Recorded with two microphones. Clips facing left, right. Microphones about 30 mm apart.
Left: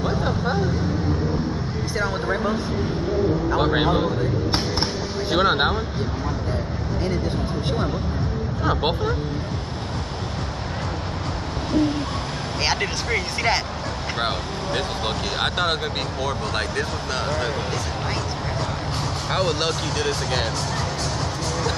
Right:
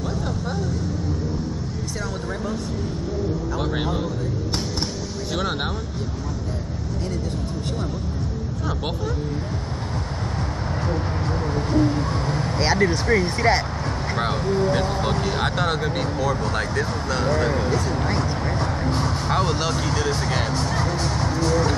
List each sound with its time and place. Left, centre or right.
0.0 s vehicle: left
2.0 s a sound: left
3.4 s speech: left
8.6 s speech: left
14.2 s speech: left
19.3 s speech: left